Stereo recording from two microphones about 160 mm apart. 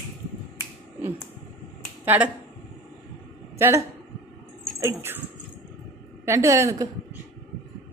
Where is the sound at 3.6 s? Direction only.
15° right (ahead or behind).